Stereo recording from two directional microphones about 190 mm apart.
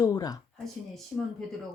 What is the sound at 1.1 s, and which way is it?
Speech, 5° left (ahead or behind).